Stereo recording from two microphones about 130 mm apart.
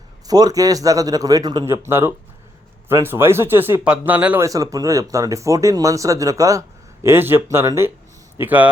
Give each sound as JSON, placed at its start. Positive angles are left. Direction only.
{"t": 0.3, "sound": "speech", "side_deg": -30}
{"t": 1.6, "sound": "speech", "side_deg": -20}
{"t": 4.4, "sound": "speech", "side_deg": -25}